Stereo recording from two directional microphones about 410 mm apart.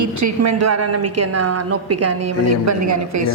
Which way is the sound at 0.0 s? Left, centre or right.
Right.